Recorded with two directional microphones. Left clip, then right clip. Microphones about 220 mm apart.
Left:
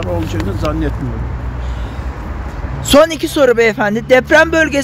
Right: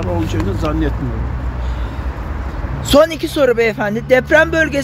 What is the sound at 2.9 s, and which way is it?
Speech, 20° left (ahead or behind).